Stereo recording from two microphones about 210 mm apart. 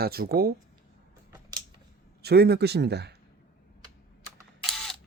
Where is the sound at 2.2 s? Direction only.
50° right (ahead or behind).